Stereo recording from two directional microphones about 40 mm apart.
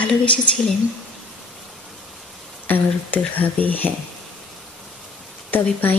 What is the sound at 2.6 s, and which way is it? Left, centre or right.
Speech, left.